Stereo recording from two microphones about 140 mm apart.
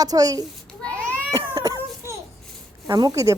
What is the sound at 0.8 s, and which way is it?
Baby cry, 10° left (ahead or behind).